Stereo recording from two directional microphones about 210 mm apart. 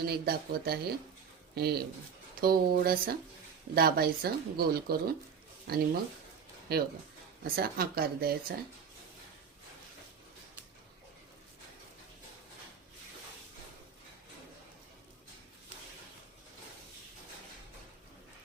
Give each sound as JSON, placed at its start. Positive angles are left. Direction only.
{"t": 0.0, "sound": "speech", "side_deg": -45}